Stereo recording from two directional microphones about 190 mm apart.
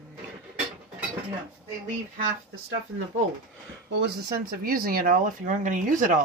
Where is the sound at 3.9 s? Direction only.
60° right (ahead or behind); by 6.1 s 45° right (ahead or behind).